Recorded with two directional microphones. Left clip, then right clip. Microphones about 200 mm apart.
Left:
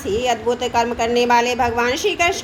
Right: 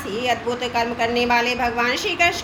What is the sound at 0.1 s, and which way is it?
A woman's voice, 55° left (ahead or behind).